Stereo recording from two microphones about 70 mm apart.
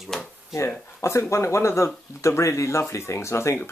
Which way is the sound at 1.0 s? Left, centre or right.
Left.